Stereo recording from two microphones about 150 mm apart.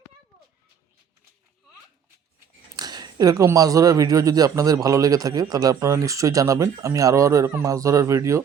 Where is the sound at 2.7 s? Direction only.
25° right (ahead or behind).